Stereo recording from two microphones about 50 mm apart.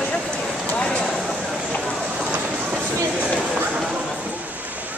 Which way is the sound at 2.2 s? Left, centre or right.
Right.